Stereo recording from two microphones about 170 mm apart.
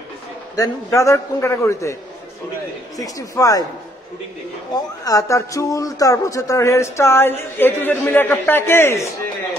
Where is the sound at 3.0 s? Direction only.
20° left (ahead or behind).